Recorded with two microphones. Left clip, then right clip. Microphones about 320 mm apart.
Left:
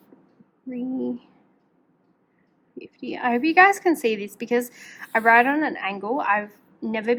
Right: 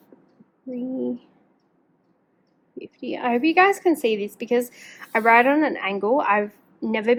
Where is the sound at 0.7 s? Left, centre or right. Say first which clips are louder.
Right 1 dB; centre.